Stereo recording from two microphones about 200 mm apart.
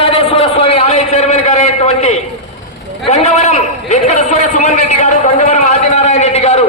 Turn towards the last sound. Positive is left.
turn(degrees=35)  # may be behind; listen again after turning